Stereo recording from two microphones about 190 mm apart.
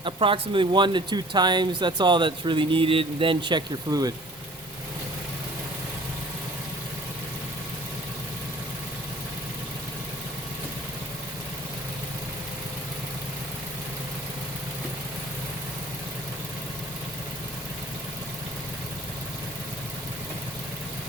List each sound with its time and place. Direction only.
0.0 s speech: 25° right (ahead or behind)